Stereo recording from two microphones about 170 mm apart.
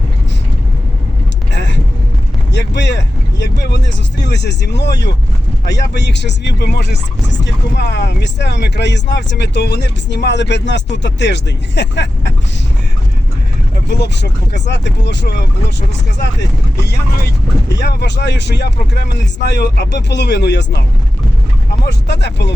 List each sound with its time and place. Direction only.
1.5 s vehicle: 90° left
2.5 s speech: 90° left
14.0 s speech: 90° left
16.8 s speech: 75° left (ahead or behind)
21.8 s speech: 90° left